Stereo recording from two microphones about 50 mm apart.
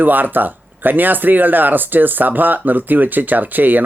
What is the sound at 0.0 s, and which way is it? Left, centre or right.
Speech, right.